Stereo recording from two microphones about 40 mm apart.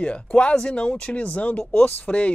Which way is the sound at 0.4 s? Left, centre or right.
Left.